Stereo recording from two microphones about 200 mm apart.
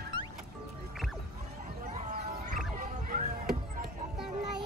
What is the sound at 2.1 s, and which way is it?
Music, 45° right (ahead or behind).